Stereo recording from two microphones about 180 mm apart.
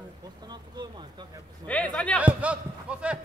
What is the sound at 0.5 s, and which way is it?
Speech, 25° right (ahead or behind).